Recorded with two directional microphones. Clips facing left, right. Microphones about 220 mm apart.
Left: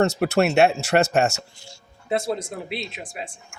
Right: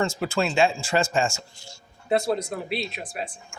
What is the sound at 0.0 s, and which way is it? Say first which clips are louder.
Speech: left 6 dB; 70° left (ahead or behind).